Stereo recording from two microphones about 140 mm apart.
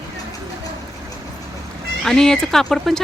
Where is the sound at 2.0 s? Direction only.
5° left (ahead or behind).